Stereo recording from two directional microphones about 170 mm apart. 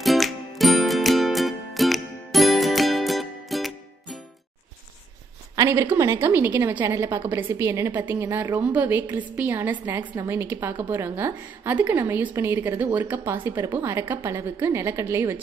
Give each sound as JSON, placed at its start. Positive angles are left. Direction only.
{"t": 0.0, "sound": "music", "side_deg": 0}
{"t": 5.6, "sound": "a woman's voice", "side_deg": -15}